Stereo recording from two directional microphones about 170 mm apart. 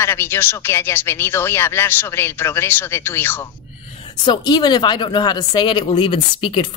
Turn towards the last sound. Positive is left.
turn(degrees=30)  # may be behind; listen again after turning